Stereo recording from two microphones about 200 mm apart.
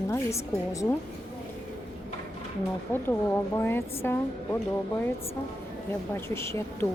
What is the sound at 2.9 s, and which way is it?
A woman's voice, 10° left (ahead or behind).